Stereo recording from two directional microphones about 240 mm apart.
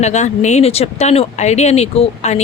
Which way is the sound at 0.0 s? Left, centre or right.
Left.